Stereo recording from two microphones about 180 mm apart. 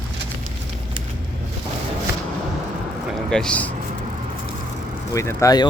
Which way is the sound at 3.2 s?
5° left (ahead or behind).